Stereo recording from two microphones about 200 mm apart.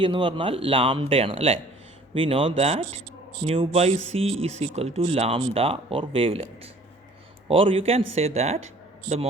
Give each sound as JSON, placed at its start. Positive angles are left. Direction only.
{"t": 0.0, "sound": "speech", "side_deg": -25}